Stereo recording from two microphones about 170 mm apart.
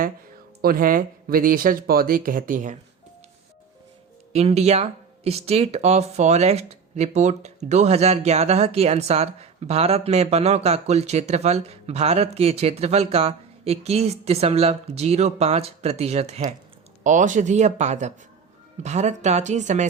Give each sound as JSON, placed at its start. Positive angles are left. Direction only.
{"t": 0.6, "sound": "speech", "side_deg": -55}
{"t": 4.3, "sound": "speech", "side_deg": -40}